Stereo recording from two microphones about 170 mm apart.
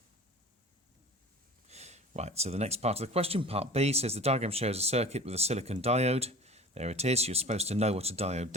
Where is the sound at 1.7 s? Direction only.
40° right (ahead or behind).